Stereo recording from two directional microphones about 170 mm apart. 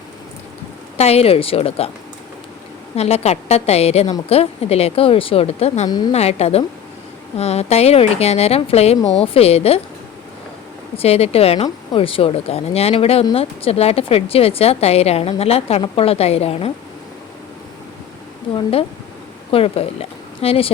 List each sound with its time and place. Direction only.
0.9 s a woman's voice: 40° left (ahead or behind)
2.9 s a woman's voice: 35° left (ahead or behind)
5.9 s a woman's voice: 25° left (ahead or behind)
6.1 s a woman's voice: 35° left (ahead or behind)
10.9 s a woman's voice: 35° left (ahead or behind)
18.5 s a woman's voice: 35° left (ahead or behind)